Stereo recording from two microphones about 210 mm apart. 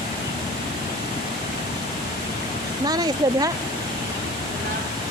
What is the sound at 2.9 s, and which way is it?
Speech, 20° right (ahead or behind).